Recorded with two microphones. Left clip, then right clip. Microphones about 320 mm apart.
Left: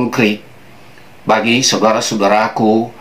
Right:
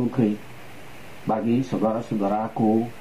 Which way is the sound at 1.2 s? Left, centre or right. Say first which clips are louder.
Left 13 dB; centre.